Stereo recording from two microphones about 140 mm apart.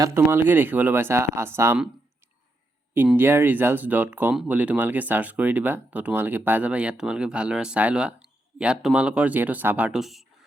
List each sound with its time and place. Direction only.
0.0 s speech: 20° right (ahead or behind)
3.2 s speech: 15° right (ahead or behind)